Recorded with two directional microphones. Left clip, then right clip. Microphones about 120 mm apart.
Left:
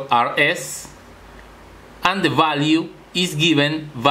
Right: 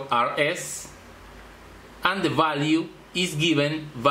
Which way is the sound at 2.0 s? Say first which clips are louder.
Left 5 dB; 35° left (ahead or behind).